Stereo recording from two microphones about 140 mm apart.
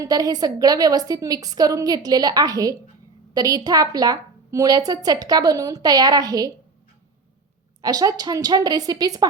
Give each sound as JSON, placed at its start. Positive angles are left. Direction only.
{"t": 0.0, "sound": "a woman's voice", "side_deg": -25}
{"t": 7.8, "sound": "a woman's voice", "side_deg": -25}